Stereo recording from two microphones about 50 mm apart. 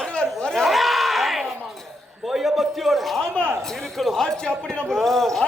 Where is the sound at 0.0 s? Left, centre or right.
Centre.